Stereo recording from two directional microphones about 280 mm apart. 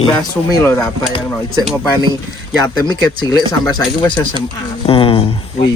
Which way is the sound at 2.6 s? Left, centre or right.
Centre.